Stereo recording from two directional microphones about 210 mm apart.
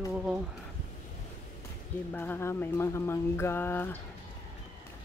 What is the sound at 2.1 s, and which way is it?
Speech, 10° left (ahead or behind).